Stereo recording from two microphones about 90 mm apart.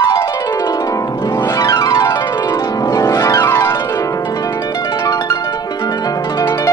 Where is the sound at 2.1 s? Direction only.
55° left (ahead or behind); by 3.3 s 40° left (ahead or behind).